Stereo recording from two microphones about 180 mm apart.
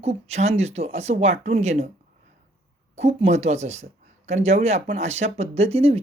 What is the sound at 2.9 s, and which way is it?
Speech, 35° right (ahead or behind).